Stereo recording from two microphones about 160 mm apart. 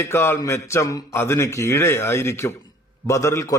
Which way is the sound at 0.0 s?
15° left (ahead or behind).